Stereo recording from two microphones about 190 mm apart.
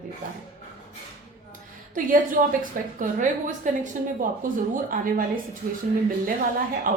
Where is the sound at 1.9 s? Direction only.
45° right (ahead or behind).